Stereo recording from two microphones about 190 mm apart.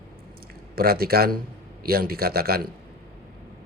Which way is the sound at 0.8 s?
55° right (ahead or behind).